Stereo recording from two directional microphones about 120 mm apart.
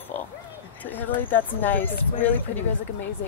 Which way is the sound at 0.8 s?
15° left (ahead or behind).